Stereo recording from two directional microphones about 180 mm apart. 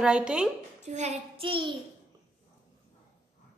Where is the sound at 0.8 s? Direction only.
40° right (ahead or behind).